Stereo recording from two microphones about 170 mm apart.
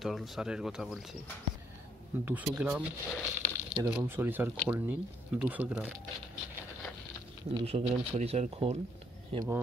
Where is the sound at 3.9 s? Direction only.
10° right (ahead or behind).